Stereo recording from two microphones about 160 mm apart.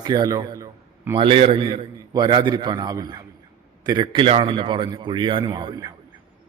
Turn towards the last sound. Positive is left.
turn(degrees=-25)  # may be behind; listen again after turning